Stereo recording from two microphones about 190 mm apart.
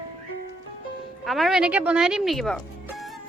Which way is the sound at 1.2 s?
Centre (ahead or behind).